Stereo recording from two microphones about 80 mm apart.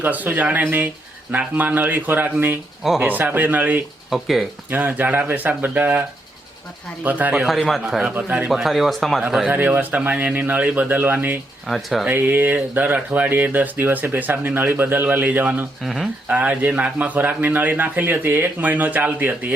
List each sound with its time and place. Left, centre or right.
0.0 s a man's voice: right
4.1 s speech: centre
4.7 s a man's voice: right
7.0 s a man's voice: right
8.4 s speech: centre
9.5 s a man's voice: right
11.6 s speech: centre
12.0 s a man's voice: right
15.8 s speech: centre
16.3 s a man's voice: centre